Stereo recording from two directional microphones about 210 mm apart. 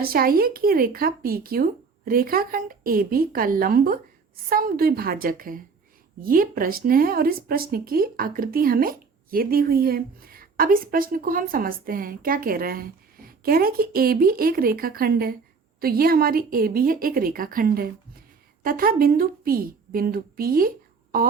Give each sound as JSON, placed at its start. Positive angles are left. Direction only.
{"t": 0.0, "sound": "a woman's voice", "side_deg": -45}